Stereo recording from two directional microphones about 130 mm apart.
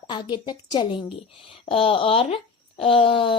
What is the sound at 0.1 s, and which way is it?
A woman's voice, 35° left (ahead or behind).